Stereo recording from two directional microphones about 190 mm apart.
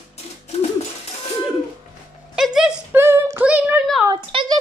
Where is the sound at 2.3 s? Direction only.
Centre (ahead or behind).